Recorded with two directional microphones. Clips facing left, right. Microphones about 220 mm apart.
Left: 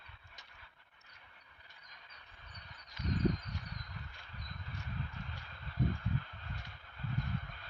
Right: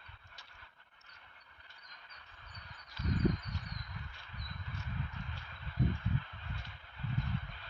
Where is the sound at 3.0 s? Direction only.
20° left (ahead or behind).